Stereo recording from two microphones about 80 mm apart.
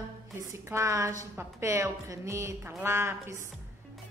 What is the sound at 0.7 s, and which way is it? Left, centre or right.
A woman's voice, right.